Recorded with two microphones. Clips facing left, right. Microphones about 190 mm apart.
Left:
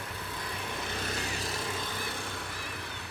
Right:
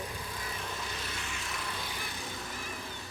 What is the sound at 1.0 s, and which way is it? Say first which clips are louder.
Vehicle: left 6 dB; 40° left (ahead or behind).